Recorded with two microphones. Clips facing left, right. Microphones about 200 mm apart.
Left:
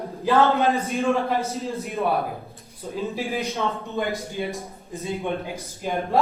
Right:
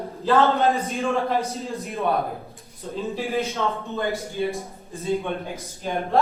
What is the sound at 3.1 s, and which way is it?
Speech, 15° left (ahead or behind).